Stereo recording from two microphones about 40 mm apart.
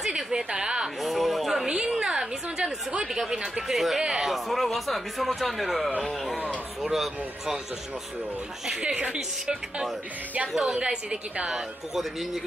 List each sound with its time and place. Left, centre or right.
0.0 s a sound: centre
0.5 s speech: centre
1.0 s speech: centre
2.0 s a woman's voice: centre
4.7 s speech: centre
8.8 s speech: right
10.8 s speech: right
11.4 s speech: centre